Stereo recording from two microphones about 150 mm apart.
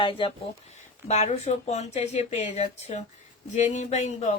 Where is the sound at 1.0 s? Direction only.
50° left (ahead or behind).